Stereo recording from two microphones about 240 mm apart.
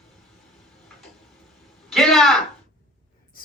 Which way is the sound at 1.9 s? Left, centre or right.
Centre.